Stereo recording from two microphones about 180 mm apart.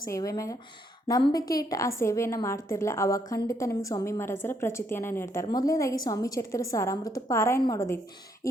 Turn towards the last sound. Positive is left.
turn(degrees=20)  # may be behind; listen again after turning